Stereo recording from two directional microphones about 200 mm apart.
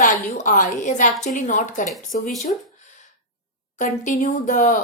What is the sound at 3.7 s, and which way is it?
A woman's voice, 40° left (ahead or behind).